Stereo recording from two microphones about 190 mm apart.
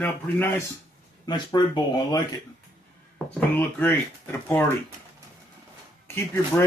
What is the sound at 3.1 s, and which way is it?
Speech, 10° left (ahead or behind).